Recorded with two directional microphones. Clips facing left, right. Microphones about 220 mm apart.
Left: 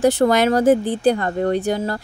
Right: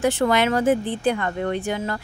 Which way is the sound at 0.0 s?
40° left (ahead or behind).